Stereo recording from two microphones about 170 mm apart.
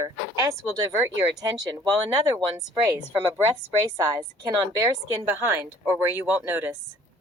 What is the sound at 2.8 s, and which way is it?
Speech, 20° right (ahead or behind).